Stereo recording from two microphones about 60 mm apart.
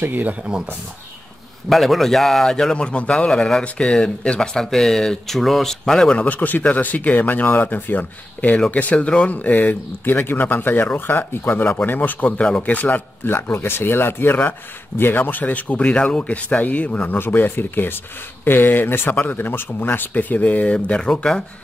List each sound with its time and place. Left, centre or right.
0.0 s speech: right
1.7 s speech: centre
3.3 s speech: centre
6.1 s speech: left
17.2 s speech: left; by 21.5 s centre